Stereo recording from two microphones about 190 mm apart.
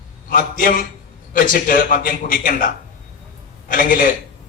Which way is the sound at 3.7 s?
45° left (ahead or behind).